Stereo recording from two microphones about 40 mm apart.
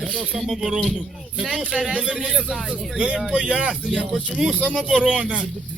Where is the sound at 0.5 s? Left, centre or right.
Centre.